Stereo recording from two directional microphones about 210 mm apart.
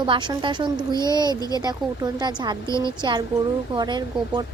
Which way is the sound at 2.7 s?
15° left (ahead or behind).